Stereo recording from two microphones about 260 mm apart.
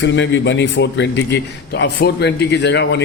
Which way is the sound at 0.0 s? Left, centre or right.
Left.